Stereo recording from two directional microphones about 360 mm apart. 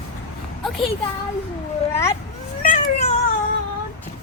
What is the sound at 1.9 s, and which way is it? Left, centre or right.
Cat, centre.